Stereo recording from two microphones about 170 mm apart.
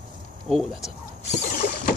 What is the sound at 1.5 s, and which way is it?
Mechanisms, 55° left (ahead or behind).